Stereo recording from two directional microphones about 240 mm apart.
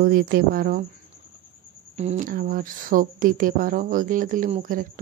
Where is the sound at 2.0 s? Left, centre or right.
Right.